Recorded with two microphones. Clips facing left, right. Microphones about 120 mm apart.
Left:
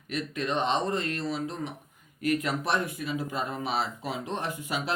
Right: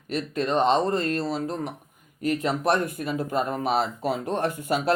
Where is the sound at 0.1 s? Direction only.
35° right (ahead or behind).